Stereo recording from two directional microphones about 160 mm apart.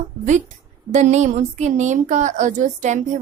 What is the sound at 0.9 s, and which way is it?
A woman's voice, 45° right (ahead or behind).